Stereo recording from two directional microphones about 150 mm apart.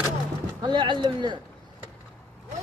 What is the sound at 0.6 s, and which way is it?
Speech, 30° right (ahead or behind).